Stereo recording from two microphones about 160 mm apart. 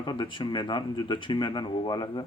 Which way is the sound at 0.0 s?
30° left (ahead or behind).